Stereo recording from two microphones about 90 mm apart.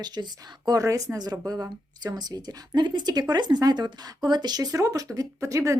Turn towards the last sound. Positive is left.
turn(degrees=-35)  # may be behind; listen again after turning